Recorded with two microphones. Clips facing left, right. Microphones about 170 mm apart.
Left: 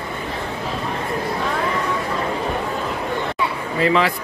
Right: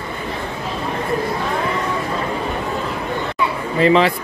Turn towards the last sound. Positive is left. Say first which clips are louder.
# right 4 dB
turn(degrees=-25)  # may be behind; listen again after turning